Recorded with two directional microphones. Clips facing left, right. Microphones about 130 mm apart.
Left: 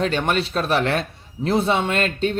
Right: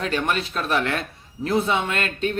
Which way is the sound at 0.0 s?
30° left (ahead or behind).